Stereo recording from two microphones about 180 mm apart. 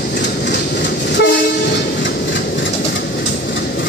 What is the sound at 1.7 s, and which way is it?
Train, 85° left.